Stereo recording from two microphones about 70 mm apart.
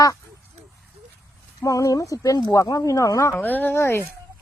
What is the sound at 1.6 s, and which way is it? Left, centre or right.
Speech, left.